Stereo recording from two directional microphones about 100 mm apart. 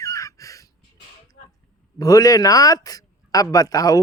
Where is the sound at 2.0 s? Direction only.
35° left (ahead or behind).